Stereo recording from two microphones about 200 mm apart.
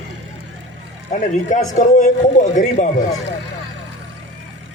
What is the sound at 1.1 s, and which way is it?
A man's voice, 40° left (ahead or behind).